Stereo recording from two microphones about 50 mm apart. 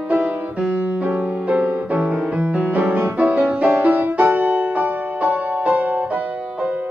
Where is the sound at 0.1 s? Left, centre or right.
Right.